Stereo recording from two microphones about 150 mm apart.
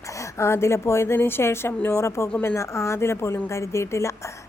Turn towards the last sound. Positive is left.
turn(degrees=20)  # may be behind; listen again after turning